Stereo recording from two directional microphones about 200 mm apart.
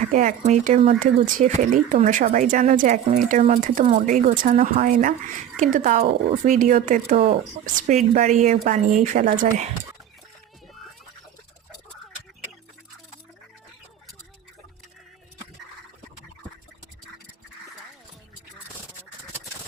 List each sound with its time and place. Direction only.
0.1 s speech: 40° right (ahead or behind)